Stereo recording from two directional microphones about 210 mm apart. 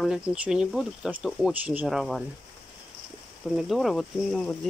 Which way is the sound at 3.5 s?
Centre (ahead or behind).